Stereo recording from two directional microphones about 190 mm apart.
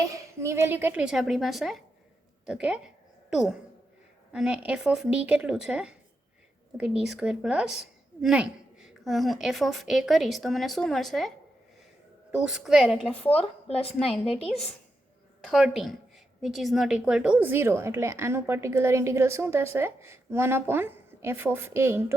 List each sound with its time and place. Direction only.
0.4 s a woman's voice: 15° right (ahead or behind)
12.3 s a woman's voice: 5° right (ahead or behind)
13.4 s a woman's voice: 30° left (ahead or behind)
15.4 s a woman's voice: centre (ahead or behind)